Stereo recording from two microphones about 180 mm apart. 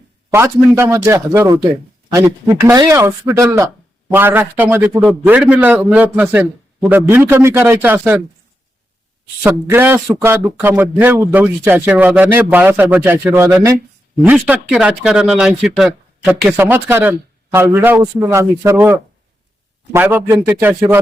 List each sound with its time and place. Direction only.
0.3 s speech: 15° right (ahead or behind)
9.4 s speech: 10° right (ahead or behind)